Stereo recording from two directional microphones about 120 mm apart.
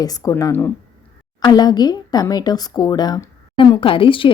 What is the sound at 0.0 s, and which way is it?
Speech, 30° left (ahead or behind).